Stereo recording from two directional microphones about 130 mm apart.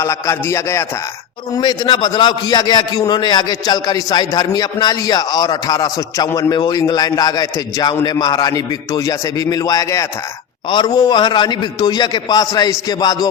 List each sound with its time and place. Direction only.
0.0 s a man's voice: 20° left (ahead or behind)
1.5 s a man's voice: 35° left (ahead or behind)